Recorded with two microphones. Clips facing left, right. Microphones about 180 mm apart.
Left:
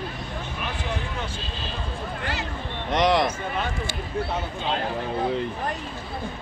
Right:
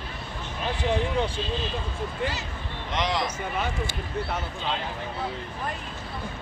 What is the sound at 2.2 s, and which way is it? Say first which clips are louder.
Speech: even; 65° left (ahead or behind).